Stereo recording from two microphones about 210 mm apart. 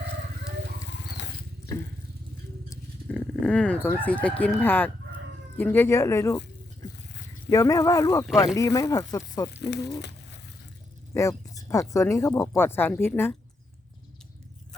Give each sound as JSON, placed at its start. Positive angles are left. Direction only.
{"t": 1.0, "sound": "a sound", "side_deg": 55}
{"t": 2.6, "sound": "speech", "side_deg": 5}
{"t": 7.5, "sound": "speech", "side_deg": 15}
{"t": 9.6, "sound": "speech", "side_deg": 55}
{"t": 11.1, "sound": "speech", "side_deg": 15}